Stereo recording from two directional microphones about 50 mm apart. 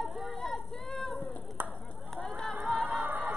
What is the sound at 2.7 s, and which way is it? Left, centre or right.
Music, right.